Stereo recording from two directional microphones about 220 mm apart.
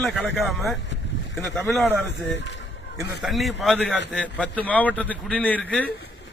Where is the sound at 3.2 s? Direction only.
Centre (ahead or behind).